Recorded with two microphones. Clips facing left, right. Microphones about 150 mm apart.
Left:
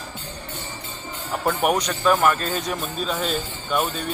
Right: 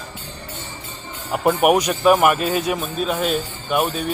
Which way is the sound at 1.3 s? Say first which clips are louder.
Right 5 dB; 10° right (ahead or behind).